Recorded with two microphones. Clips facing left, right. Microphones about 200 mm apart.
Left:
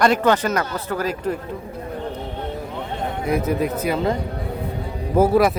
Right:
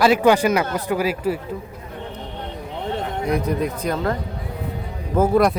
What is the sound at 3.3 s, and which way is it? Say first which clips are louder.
Speech: left 2 dB; 5° left (ahead or behind).